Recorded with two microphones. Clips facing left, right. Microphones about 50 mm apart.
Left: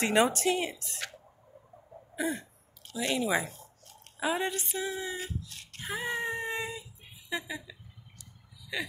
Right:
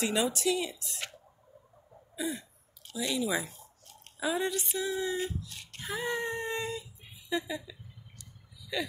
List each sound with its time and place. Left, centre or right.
0.0 s speech: left
2.1 s throat clearing: left
3.0 s speech: left
4.7 s a sound: left